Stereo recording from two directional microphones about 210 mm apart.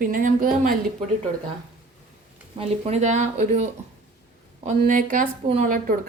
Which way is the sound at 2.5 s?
30° right (ahead or behind).